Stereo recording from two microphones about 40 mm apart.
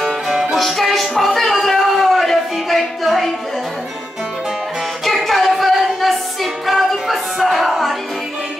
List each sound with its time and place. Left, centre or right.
0.0 s music: centre
0.6 s music: centre
2.0 s a sound: centre
5.0 s music: centre